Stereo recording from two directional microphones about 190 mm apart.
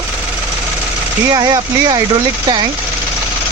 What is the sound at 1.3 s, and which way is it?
Speech, 20° right (ahead or behind).